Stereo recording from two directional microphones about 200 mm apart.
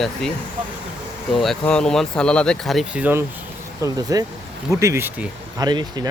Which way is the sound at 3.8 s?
20° right (ahead or behind).